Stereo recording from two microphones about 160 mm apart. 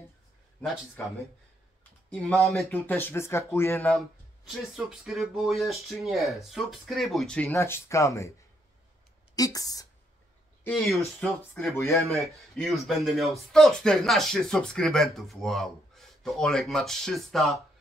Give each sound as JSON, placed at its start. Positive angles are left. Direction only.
{"t": 2.0, "sound": "speech", "side_deg": 5}
{"t": 2.7, "sound": "speech", "side_deg": 10}
{"t": 4.5, "sound": "speech", "side_deg": -5}
{"t": 7.5, "sound": "speech", "side_deg": 15}
{"t": 9.3, "sound": "speech", "side_deg": 20}
{"t": 11.1, "sound": "speech", "side_deg": 10}
{"t": 11.9, "sound": "speech", "side_deg": 0}